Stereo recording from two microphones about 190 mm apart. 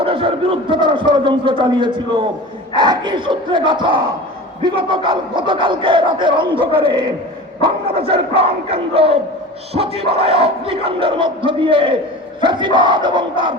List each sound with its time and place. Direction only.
0.0 s speech: 30° right (ahead or behind)